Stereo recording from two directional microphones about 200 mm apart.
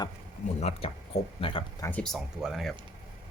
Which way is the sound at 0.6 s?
30° left (ahead or behind).